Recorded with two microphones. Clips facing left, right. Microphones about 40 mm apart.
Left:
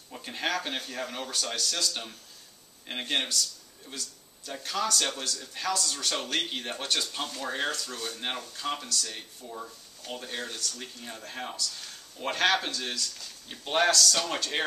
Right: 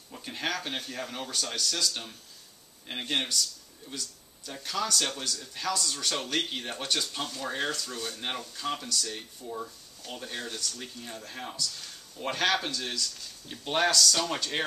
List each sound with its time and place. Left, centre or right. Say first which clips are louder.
0.1 s speech: left 2 dB; centre